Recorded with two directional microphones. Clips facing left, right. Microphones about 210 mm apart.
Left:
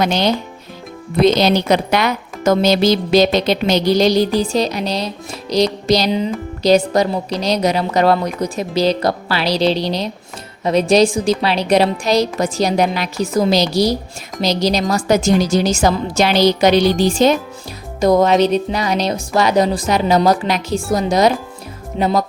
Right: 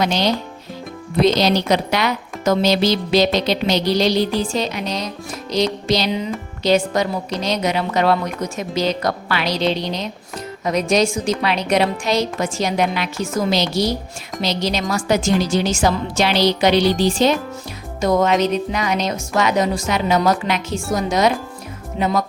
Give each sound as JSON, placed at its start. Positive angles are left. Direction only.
{"t": 0.0, "sound": "a woman's voice", "side_deg": 55}
{"t": 18.0, "sound": "a woman's voice", "side_deg": 35}